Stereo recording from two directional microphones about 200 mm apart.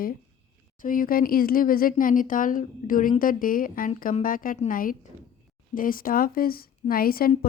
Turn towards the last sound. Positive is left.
turn(degrees=50)  # may be behind; listen again after turning